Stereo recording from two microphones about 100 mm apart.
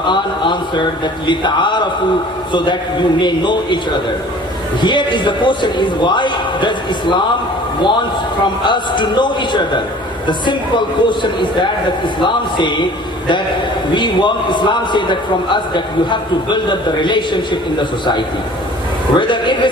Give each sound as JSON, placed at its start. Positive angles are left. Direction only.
{"t": 0.0, "sound": "a man's voice", "side_deg": 50}
{"t": 4.8, "sound": "a man's voice", "side_deg": 50}
{"t": 13.9, "sound": "a man's voice", "side_deg": 50}
{"t": 19.1, "sound": "a man's voice", "side_deg": 50}